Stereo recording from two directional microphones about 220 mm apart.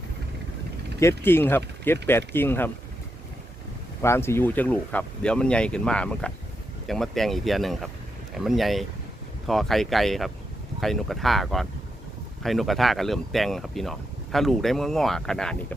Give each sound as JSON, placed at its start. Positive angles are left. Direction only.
{"t": 0.9, "sound": "speech", "side_deg": 10}
{"t": 4.0, "sound": "speech", "side_deg": 10}